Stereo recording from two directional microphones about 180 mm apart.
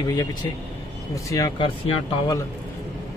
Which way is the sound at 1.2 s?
20° left (ahead or behind).